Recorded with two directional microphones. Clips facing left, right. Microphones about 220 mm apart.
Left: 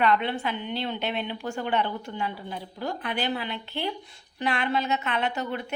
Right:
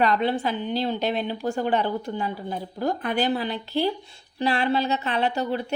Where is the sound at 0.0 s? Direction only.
35° right (ahead or behind).